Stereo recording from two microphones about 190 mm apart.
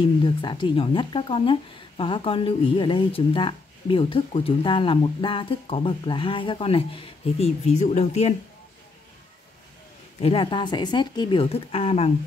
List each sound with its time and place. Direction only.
0.0 s speech: 25° left (ahead or behind)
10.2 s speech: 25° left (ahead or behind)